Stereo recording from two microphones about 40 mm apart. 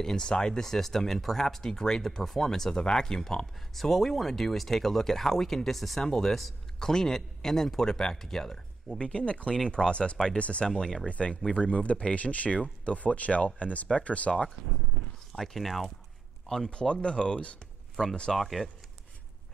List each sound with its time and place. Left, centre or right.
0.0 s speech: centre
0.7 s speech: centre
8.9 s speech: left
10.7 s speech: centre
11.1 s speech: left
15.3 s speech: centre
16.7 s speech: left
18.3 s speech: centre